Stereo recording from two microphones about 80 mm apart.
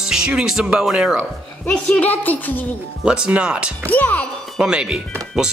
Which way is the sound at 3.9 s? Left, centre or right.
Left.